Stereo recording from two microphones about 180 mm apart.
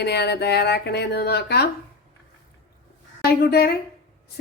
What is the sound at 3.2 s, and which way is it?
Speech, 60° left (ahead or behind).